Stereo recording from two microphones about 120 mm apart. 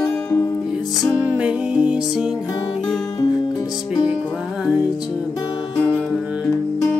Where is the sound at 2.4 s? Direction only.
30° left (ahead or behind).